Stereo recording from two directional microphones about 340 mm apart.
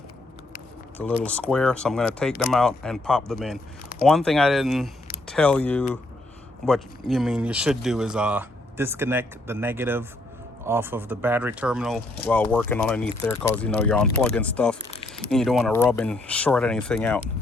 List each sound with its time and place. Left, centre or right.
0.9 s speech: centre